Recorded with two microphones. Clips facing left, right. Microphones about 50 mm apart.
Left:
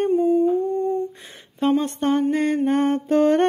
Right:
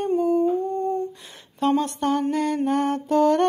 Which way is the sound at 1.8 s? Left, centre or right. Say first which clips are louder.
Left 3 dB; left.